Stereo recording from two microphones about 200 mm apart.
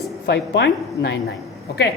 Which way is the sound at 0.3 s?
60° left (ahead or behind).